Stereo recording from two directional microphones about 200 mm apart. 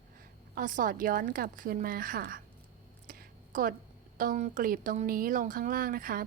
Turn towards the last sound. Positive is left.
turn(degrees=-45)  # may be behind; listen again after turning